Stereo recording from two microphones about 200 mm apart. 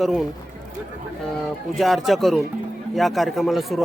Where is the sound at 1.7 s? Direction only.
Centre (ahead or behind).